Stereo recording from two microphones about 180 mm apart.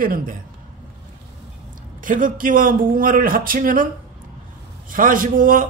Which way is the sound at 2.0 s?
50° right (ahead or behind).